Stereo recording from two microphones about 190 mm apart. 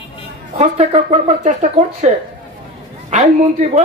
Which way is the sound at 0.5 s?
35° right (ahead or behind).